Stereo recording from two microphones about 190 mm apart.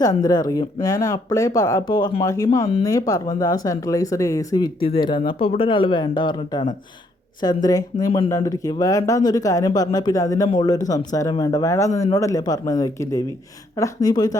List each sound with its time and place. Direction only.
0.0 s speech: 20° left (ahead or behind)